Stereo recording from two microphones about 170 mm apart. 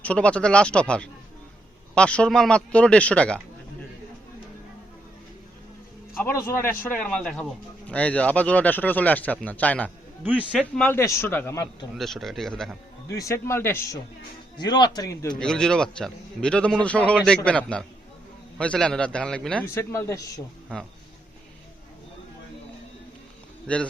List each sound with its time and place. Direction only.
0.0 s speech: 5° left (ahead or behind)
6.1 s speech: 15° left (ahead or behind)
10.2 s a man's voice: 10° right (ahead or behind)
10.6 s speech: 10° left (ahead or behind)
11.9 s a man's voice: centre (ahead or behind)
13.1 s a man's voice: 20° left (ahead or behind)
15.4 s a man's voice: 5° left (ahead or behind)
19.6 s speech: 15° left (ahead or behind)
23.6 s speech: 5° left (ahead or behind)